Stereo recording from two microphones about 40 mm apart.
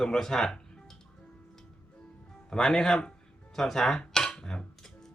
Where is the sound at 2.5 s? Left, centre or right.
Centre.